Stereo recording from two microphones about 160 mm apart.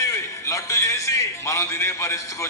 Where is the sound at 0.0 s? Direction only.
20° left (ahead or behind).